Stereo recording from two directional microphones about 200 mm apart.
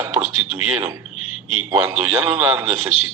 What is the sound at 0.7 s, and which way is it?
A man's voice, 15° right (ahead or behind).